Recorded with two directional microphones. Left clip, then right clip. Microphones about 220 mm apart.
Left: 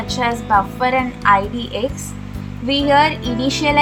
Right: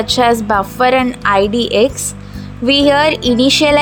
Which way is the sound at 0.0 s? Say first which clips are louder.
Right 8 dB; 40° right (ahead or behind).